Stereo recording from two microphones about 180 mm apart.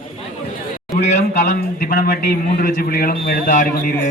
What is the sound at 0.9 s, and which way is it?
A man's voice, 40° left (ahead or behind).